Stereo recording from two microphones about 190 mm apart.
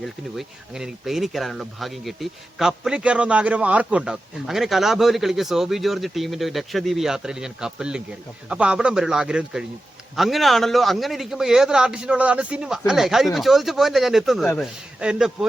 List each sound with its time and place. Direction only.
0.0 s speech: centre (ahead or behind)